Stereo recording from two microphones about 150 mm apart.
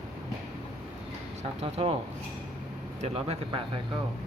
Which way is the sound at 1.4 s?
45° right (ahead or behind).